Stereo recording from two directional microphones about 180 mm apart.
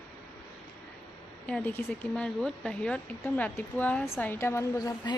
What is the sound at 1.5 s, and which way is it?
Speech, 5° left (ahead or behind).